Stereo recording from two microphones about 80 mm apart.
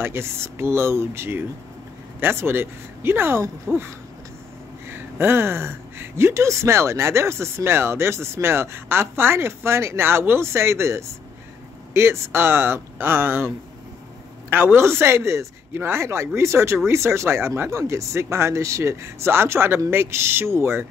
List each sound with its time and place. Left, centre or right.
0.0 s speech: right
14.5 s speech: right